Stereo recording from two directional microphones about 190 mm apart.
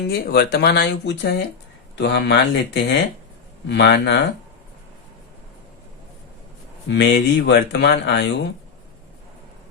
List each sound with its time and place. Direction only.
0.1 s speech: 55° left (ahead or behind)
6.8 s speech: 70° left (ahead or behind)